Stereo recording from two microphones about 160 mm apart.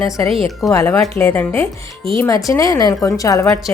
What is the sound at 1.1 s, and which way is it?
A woman's voice, 15° left (ahead or behind).